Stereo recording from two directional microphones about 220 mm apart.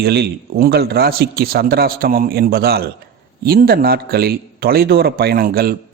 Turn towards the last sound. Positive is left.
turn(degrees=-45)  # may be behind; listen again after turning